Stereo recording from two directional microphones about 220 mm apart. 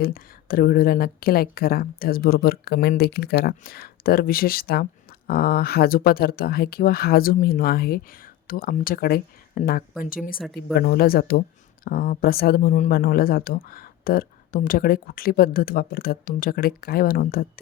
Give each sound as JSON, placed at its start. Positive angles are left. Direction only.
{"t": 0.0, "sound": "a woman's voice", "side_deg": 40}